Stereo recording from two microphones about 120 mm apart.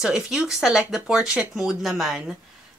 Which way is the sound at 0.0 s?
5° right (ahead or behind).